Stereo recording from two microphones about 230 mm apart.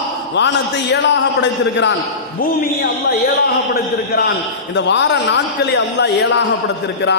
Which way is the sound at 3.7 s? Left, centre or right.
Left.